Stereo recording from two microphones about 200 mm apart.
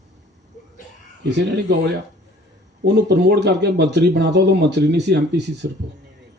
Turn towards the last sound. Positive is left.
turn(degrees=-60)  # may be behind; listen again after turning